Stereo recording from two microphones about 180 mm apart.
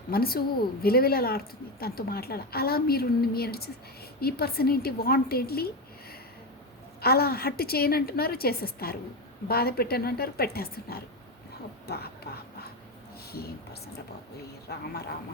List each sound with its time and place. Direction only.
0.1 s speech: 60° left (ahead or behind)
11.9 s a sound: 60° left (ahead or behind)
14.7 s speech: 65° left (ahead or behind)